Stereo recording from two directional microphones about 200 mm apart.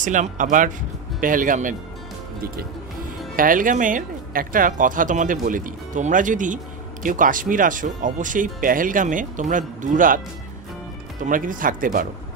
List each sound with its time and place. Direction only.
0.0 s speech: 40° right (ahead or behind)
3.3 s speech: 45° right (ahead or behind)
11.2 s speech: 40° right (ahead or behind)